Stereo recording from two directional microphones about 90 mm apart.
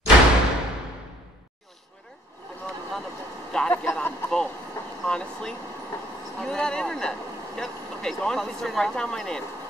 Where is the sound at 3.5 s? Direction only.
10° left (ahead or behind).